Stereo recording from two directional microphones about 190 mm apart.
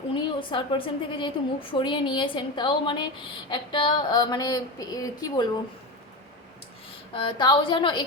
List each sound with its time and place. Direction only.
0.1 s a woman's voice: 25° left (ahead or behind)
7.1 s a woman's voice: 25° left (ahead or behind)